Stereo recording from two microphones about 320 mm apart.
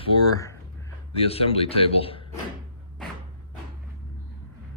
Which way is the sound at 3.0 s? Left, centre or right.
Centre.